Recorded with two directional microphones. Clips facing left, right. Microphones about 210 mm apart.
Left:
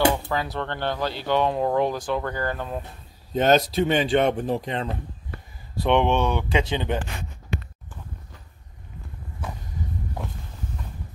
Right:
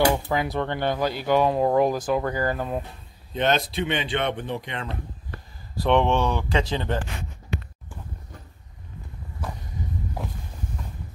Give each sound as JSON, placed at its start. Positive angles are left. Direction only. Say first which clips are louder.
{"t": 0.1, "sound": "speech", "louder": "right 2 dB", "side_deg": -15}
{"t": 3.3, "sound": "speech", "louder": "left 4 dB", "side_deg": 40}
{"t": 5.3, "sound": "speech", "louder": "left 2 dB", "side_deg": 0}